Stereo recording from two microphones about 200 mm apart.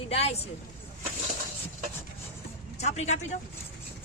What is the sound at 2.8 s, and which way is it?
Speech, 35° left (ahead or behind).